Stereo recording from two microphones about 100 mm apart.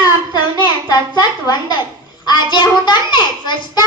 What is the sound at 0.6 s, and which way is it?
A child's voice, 45° left (ahead or behind).